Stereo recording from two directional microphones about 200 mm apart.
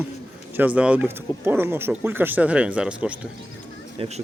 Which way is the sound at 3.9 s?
30° right (ahead or behind).